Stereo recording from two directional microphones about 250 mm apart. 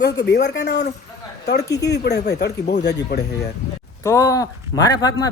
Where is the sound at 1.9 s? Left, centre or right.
Left.